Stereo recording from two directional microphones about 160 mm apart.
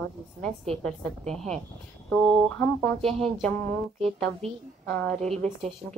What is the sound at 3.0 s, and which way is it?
Speech, 5° left (ahead or behind).